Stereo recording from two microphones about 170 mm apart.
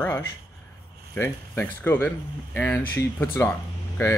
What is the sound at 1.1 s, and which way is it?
Speech, 10° left (ahead or behind).